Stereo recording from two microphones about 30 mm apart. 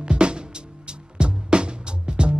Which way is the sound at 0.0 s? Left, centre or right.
Right.